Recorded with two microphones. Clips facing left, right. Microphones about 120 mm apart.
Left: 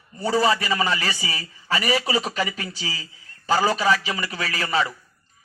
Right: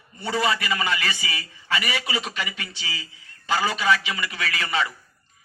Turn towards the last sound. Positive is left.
turn(degrees=35)  # may be behind; listen again after turning